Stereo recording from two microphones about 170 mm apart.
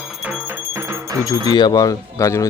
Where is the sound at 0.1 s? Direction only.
5° right (ahead or behind).